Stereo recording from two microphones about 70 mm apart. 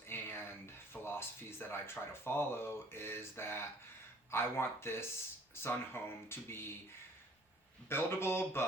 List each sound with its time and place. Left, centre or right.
0.1 s a sound: left
2.2 s speech: left
7.9 s speech: left